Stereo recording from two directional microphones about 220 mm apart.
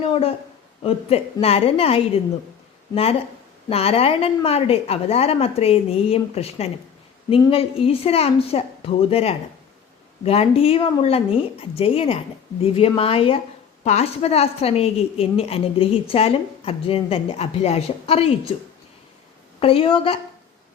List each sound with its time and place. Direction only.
0.0 s a woman's voice: 25° left (ahead or behind)
19.5 s a woman's voice: 25° left (ahead or behind)